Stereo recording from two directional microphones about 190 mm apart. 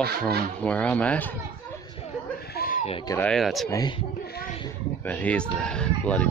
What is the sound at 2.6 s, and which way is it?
Goat, 45° left (ahead or behind).